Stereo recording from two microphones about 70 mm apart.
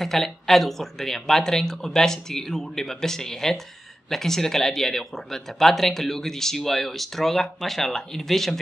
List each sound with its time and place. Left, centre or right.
0.0 s speech: centre